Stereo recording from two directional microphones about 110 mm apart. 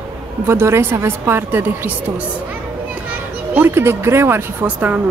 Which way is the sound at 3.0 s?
15° right (ahead or behind).